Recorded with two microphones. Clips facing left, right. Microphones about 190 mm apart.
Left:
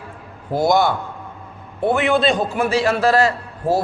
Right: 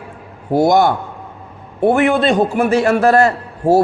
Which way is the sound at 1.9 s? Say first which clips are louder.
Right 3 dB; 50° right (ahead or behind).